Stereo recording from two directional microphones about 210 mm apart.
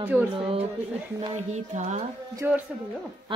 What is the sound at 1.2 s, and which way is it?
Speech, 30° right (ahead or behind).